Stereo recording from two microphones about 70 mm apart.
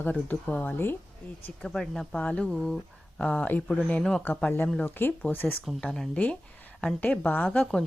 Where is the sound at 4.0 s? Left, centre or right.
Centre.